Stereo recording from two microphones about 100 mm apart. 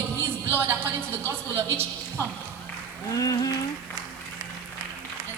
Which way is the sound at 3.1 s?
35° left (ahead or behind).